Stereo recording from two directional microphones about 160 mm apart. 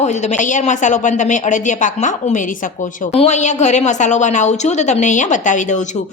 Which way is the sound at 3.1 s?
40° left (ahead or behind).